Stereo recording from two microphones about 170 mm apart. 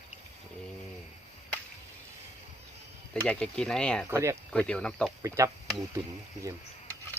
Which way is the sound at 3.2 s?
5° left (ahead or behind).